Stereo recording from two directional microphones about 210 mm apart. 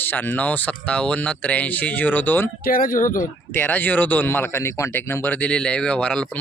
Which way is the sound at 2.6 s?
40° left (ahead or behind).